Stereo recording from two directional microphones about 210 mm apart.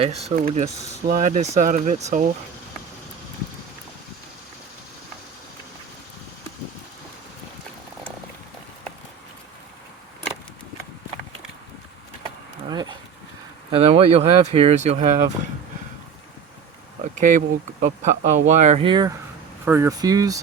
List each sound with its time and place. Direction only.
0.3 s speech: 30° right (ahead or behind)
12.6 s a sound: 20° right (ahead or behind)
13.7 s speech: 25° right (ahead or behind)
17.2 s speech: 35° right (ahead or behind)
19.6 s speech: 10° right (ahead or behind)